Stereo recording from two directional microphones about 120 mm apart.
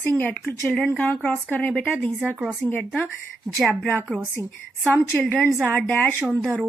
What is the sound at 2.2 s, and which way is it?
Speech, 5° right (ahead or behind).